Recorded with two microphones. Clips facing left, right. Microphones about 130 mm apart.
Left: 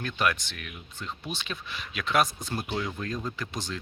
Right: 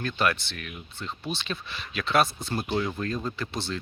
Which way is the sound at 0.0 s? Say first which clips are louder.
Right 2 dB; 5° left (ahead or behind).